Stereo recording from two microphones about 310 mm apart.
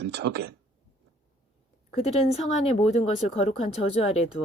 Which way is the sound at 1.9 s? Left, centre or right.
Left.